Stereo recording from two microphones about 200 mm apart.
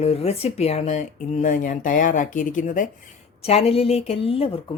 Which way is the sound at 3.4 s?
30° left (ahead or behind).